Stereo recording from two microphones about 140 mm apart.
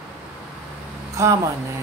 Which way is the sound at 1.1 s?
20° right (ahead or behind).